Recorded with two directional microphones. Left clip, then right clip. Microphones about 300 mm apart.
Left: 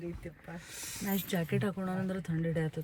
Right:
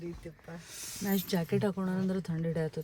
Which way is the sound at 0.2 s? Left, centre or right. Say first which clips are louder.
Even; centre.